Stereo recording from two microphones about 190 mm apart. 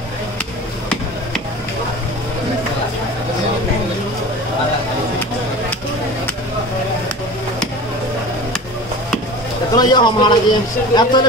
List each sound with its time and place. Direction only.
9.8 s a man's voice: 20° left (ahead or behind)